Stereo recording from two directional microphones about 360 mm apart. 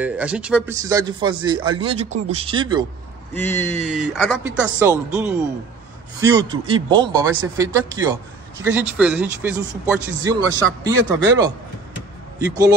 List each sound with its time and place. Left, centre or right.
0.0 s a man's voice: centre
3.3 s speech: centre
3.7 s speech: centre
4.0 s a man's voice: centre
12.4 s a man's voice: centre